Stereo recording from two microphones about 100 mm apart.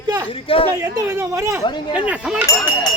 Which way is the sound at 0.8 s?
35° right (ahead or behind).